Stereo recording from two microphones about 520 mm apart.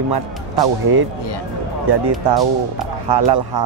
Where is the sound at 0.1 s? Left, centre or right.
Right.